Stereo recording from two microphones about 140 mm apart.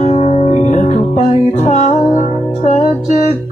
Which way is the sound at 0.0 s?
50° left (ahead or behind).